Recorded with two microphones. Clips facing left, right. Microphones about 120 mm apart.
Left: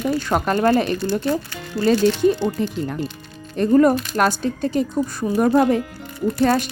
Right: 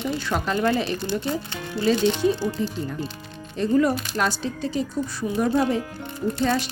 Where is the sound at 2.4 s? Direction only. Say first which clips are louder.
Left 4 dB; 65° left (ahead or behind).